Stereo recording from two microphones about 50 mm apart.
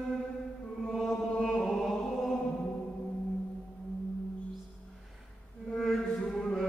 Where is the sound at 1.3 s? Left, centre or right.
Centre.